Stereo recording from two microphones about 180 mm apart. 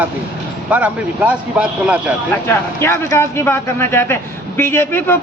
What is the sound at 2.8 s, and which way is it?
A man's voice, 15° left (ahead or behind).